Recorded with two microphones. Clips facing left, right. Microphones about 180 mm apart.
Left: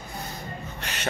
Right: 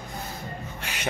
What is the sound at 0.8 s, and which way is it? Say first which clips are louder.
Music: left 1 dB; 10° right (ahead or behind).